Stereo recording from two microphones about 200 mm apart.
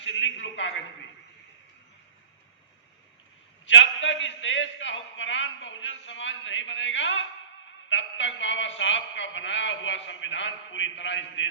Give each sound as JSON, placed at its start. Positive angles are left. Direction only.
{"t": 0.0, "sound": "a man's voice", "side_deg": 70}
{"t": 3.7, "sound": "a man's voice", "side_deg": 70}